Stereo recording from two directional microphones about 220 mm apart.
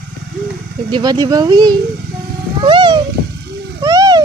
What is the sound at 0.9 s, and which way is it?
Speech, 20° right (ahead or behind).